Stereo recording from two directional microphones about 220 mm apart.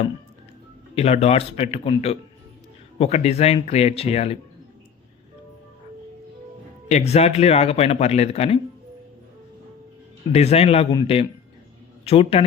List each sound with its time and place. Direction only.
0.9 s speech: 30° left (ahead or behind)
6.8 s speech: 30° left (ahead or behind)
10.3 s speech: 30° left (ahead or behind)